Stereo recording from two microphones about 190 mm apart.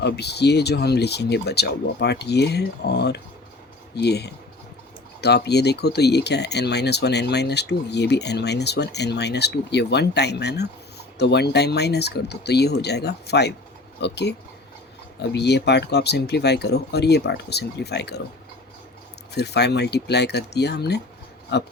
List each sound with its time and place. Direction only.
0.0 s speech: 60° left (ahead or behind)
19.3 s speech: 60° left (ahead or behind)